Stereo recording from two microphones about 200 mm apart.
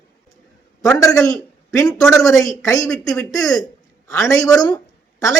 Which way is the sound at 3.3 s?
20° left (ahead or behind).